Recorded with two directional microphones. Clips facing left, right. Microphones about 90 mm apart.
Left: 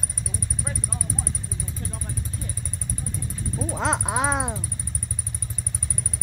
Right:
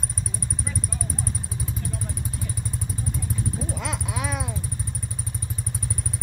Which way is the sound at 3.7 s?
30° left (ahead or behind).